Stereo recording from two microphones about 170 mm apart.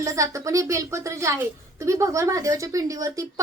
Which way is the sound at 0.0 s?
20° right (ahead or behind).